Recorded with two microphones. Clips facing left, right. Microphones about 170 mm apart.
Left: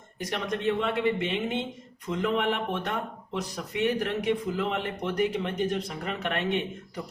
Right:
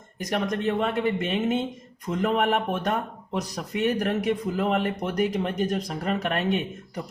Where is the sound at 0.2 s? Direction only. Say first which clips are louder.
Right 4 dB; 45° right (ahead or behind).